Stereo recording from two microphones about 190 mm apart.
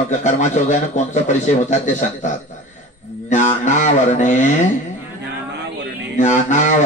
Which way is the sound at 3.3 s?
40° left (ahead or behind).